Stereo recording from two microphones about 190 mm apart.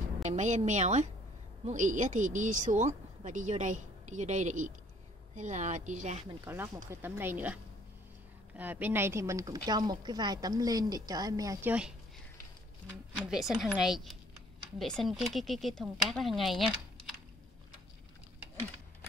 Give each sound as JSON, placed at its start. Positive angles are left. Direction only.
{"t": 0.2, "sound": "speech", "side_deg": -40}
{"t": 6.4, "sound": "speech", "side_deg": -15}
{"t": 8.5, "sound": "a woman's voice", "side_deg": -10}
{"t": 13.1, "sound": "speech", "side_deg": -5}